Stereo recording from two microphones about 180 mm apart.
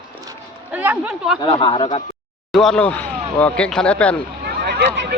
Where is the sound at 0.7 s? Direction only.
10° right (ahead or behind).